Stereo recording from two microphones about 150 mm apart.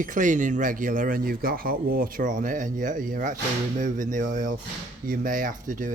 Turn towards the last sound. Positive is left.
turn(degrees=-60)  # may be behind; listen again after turning